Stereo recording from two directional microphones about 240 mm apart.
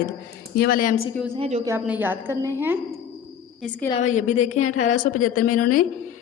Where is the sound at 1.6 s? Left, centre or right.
Centre.